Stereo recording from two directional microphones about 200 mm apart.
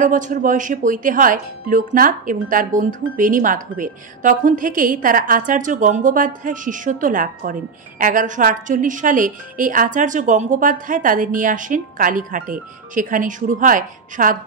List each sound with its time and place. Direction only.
0.0 s speech: 40° right (ahead or behind)